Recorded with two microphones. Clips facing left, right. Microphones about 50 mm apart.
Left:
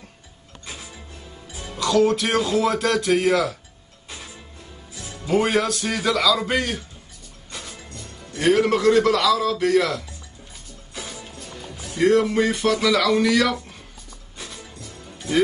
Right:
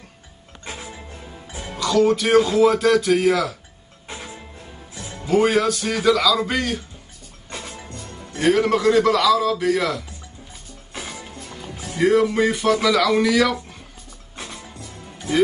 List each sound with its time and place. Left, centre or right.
0.7 s music: right
1.8 s a man's voice: centre
4.9 s music: right
5.3 s a man's voice: centre
7.5 s music: right
8.4 s a man's voice: centre
10.9 s music: right
12.0 s a man's voice: centre
14.3 s music: right